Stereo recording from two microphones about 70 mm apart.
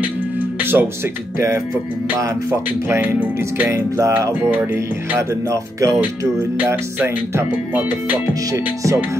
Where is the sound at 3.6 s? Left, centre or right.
Right.